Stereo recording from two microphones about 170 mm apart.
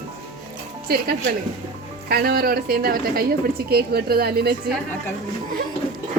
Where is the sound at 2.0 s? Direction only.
65° right (ahead or behind).